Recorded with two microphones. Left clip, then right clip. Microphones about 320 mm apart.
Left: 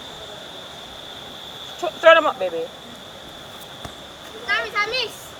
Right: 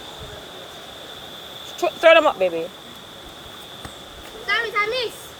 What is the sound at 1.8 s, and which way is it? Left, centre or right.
Speech, right.